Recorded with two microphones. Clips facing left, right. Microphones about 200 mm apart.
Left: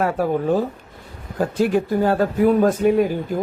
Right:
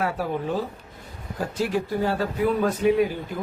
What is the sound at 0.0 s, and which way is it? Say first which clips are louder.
Speech: left 6 dB; 45° left (ahead or behind).